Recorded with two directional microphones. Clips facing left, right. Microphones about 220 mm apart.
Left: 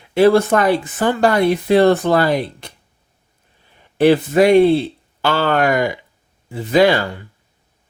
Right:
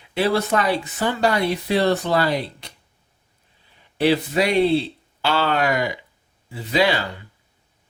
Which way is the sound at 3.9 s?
50° left (ahead or behind).